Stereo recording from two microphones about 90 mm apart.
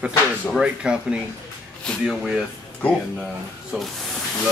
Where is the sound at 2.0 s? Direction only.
5° right (ahead or behind).